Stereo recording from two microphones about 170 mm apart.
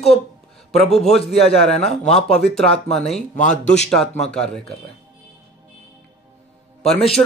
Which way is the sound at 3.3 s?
45° left (ahead or behind).